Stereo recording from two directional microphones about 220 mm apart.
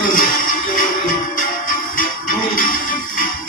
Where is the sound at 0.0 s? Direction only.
40° left (ahead or behind).